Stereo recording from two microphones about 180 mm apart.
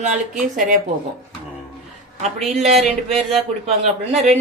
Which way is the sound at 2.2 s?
40° right (ahead or behind).